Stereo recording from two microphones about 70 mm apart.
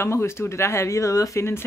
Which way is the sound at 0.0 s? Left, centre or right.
Left.